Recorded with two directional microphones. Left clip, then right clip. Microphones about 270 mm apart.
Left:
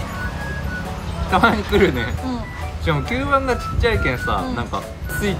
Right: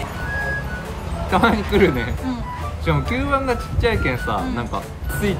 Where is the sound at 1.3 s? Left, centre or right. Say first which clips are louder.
Left 1 dB; centre.